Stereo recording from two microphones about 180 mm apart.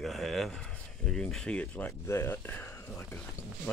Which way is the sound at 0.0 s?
Centre (ahead or behind).